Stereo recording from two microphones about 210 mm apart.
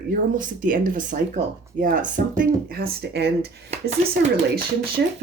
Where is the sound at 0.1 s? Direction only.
40° right (ahead or behind).